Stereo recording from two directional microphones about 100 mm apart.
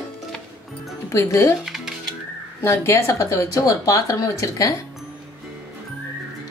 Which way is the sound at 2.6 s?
30° left (ahead or behind).